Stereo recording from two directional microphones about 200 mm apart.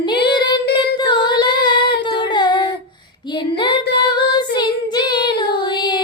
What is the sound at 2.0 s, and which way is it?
Singing, 25° left (ahead or behind).